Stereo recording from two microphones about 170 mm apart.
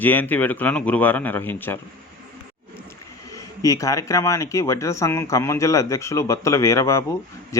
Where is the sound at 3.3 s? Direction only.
20° left (ahead or behind).